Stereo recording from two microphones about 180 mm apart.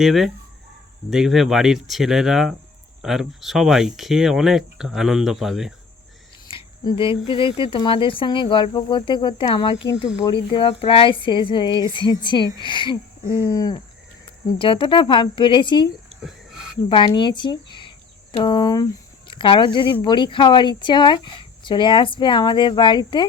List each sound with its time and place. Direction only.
0.0 s speech: centre (ahead or behind)
6.5 s speech: 30° left (ahead or behind)
9.7 s speech: 80° left
10.2 s speech: 25° left (ahead or behind)
16.9 s speech: 25° left (ahead or behind)